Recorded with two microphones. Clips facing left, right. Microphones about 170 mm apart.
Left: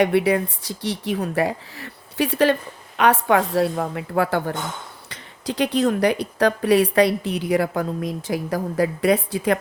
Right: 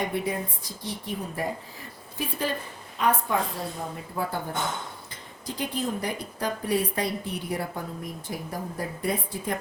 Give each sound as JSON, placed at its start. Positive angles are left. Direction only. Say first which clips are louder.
{"t": 0.0, "sound": "speech", "louder": "left 11 dB", "side_deg": 75}